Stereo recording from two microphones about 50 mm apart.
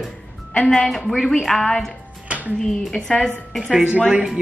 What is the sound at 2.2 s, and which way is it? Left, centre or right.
Music, right.